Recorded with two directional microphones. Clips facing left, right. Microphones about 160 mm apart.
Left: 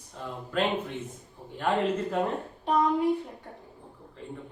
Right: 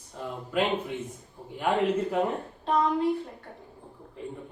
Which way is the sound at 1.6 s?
10° right (ahead or behind).